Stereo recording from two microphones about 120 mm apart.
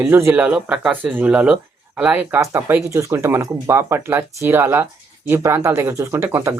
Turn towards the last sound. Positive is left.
turn(degrees=-25)  # may be behind; listen again after turning